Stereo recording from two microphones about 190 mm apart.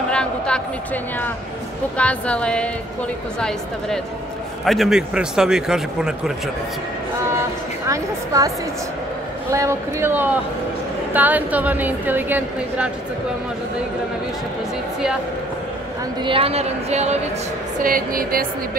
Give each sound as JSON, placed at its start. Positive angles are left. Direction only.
{"t": 0.1, "sound": "a sound", "side_deg": 5}
{"t": 2.0, "sound": "a woman's voice", "side_deg": 5}
{"t": 7.9, "sound": "a woman's voice", "side_deg": -15}
{"t": 16.2, "sound": "speech", "side_deg": -30}
{"t": 17.8, "sound": "a woman's voice", "side_deg": -50}